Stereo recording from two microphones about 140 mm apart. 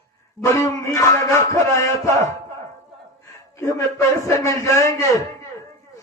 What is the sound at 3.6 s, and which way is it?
A man's voice, 25° left (ahead or behind).